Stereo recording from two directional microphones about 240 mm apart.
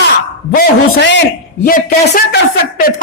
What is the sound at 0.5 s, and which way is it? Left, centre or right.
Speech, left.